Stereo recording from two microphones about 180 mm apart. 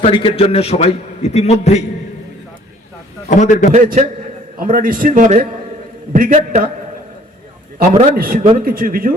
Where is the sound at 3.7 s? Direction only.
45° right (ahead or behind).